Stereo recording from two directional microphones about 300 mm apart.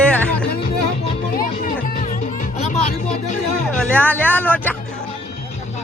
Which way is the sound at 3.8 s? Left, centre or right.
Centre.